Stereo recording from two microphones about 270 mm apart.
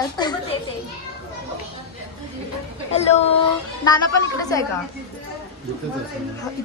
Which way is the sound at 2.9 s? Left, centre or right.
Left.